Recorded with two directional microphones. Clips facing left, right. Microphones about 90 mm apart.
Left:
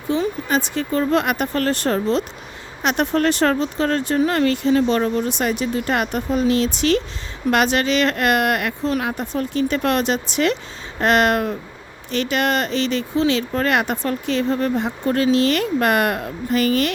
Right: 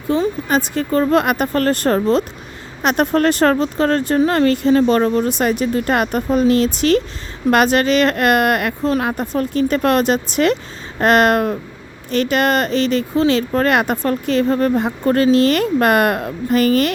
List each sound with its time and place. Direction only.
0.1 s speech: 45° right (ahead or behind)